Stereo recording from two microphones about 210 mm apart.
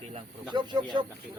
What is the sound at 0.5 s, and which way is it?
Speech, 20° right (ahead or behind).